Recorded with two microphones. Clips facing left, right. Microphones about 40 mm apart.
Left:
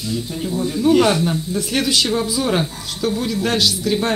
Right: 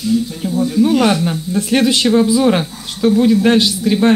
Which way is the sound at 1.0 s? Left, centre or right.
Right.